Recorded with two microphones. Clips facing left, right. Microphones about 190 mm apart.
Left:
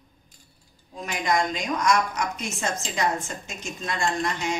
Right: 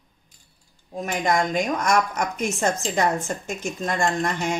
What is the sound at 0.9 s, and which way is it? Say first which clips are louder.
A woman's voice: right 3 dB; 50° right (ahead or behind).